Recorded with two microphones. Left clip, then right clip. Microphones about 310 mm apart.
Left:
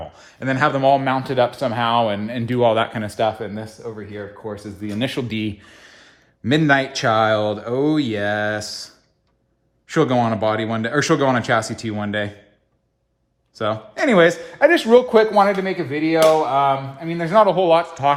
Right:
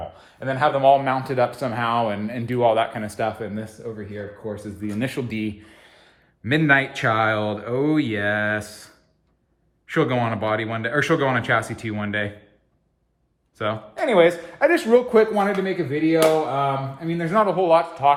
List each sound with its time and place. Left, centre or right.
0.2 s speech: left
6.4 s speech: centre
13.5 s speech: centre
14.1 s speech: left